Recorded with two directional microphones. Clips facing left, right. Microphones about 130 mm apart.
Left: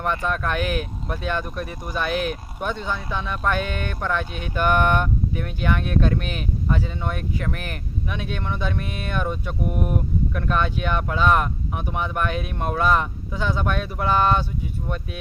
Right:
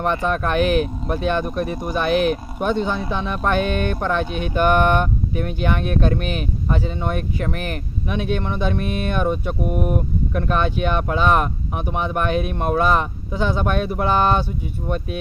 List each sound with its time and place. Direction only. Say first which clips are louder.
0.0 s speech: right 4 dB; 25° right (ahead or behind)
4.3 s speech: right 7 dB; 65° right (ahead or behind)
4.5 s speech: right 3 dB; 20° right (ahead or behind)